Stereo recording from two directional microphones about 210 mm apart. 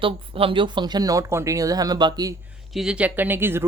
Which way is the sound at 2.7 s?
5° right (ahead or behind).